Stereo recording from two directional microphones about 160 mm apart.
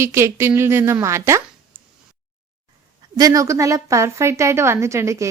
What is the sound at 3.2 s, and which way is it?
A woman's voice, 20° right (ahead or behind).